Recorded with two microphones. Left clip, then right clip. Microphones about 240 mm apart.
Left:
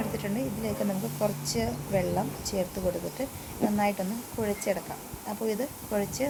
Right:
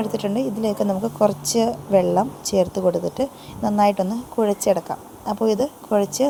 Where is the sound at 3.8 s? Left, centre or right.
Right.